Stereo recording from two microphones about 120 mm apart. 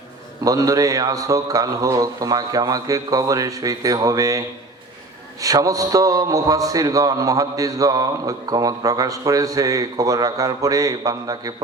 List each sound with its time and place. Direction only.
0.4 s a man's voice: 30° right (ahead or behind)